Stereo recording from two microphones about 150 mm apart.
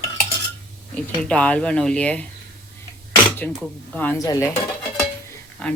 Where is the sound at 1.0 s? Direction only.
10° left (ahead or behind).